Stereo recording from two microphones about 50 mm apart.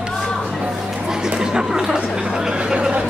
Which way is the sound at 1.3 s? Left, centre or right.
Centre.